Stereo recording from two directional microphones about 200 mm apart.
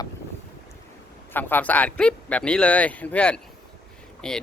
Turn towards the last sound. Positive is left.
turn(degrees=5)  # may be behind; listen again after turning